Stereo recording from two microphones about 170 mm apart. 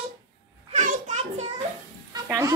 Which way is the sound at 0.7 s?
45° right (ahead or behind).